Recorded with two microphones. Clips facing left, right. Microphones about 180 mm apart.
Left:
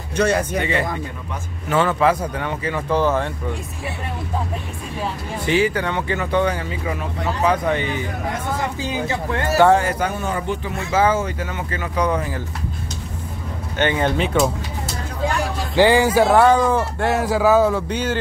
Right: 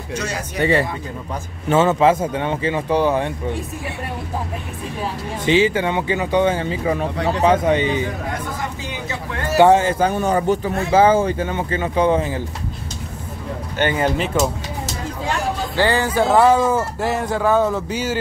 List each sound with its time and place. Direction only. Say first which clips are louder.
0.1 s speech: left 8 dB; 60° left (ahead or behind)
1.7 s speech: right 3 dB; 25° right (ahead or behind)
5.4 s speech: right 3 dB; 20° right (ahead or behind)
7.4 s speech: right 4 dB; 20° right (ahead or behind)
9.6 s speech: right 3 dB; 20° right (ahead or behind); by 11.0 s 40° right (ahead or behind)
11.0 s speech: right 4 dB; 30° right (ahead or behind)
13.7 s speech: even; 5° right (ahead or behind)
15.7 s speech: left 5 dB; 15° left (ahead or behind)
16.3 s speech: even; 5° right (ahead or behind)